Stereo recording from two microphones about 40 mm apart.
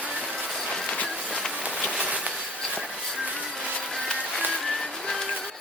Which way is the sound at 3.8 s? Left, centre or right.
Centre.